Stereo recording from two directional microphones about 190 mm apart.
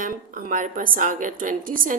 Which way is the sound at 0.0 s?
45° right (ahead or behind).